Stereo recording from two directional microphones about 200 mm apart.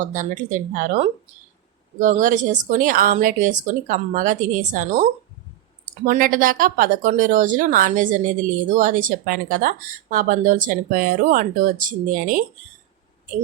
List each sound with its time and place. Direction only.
0.0 s speech: 40° right (ahead or behind)
6.1 s speech: 45° right (ahead or behind)